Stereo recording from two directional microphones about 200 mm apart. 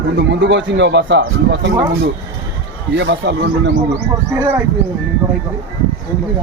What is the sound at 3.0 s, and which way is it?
Speech, 65° right (ahead or behind).